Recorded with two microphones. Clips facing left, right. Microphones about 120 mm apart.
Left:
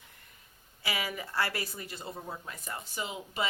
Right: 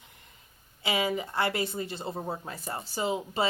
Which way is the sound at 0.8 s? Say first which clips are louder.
Right 7 dB; 25° right (ahead or behind).